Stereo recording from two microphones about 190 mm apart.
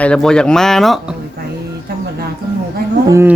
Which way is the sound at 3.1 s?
15° right (ahead or behind).